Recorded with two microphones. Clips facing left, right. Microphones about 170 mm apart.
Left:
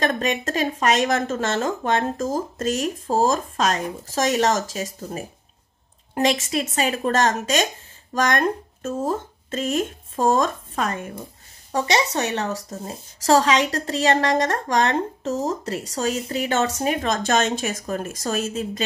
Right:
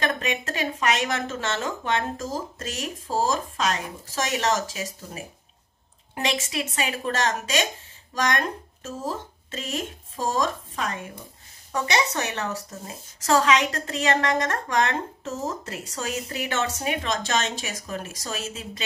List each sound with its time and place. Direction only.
0.0 s speech: 40° left (ahead or behind)
11.7 s a woman's voice: 30° left (ahead or behind); by 18.6 s 50° left (ahead or behind)